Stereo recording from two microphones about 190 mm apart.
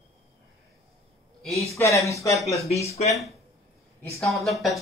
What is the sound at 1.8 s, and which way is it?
Speech, 15° left (ahead or behind).